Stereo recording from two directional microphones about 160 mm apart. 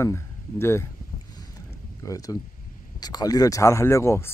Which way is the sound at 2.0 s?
20° left (ahead or behind).